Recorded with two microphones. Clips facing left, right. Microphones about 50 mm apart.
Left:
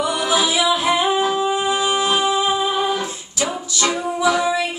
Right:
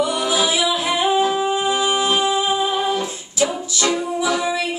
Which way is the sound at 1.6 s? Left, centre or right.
Centre.